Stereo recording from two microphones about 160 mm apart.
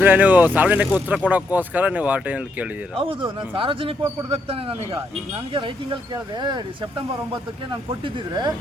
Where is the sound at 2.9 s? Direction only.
35° right (ahead or behind).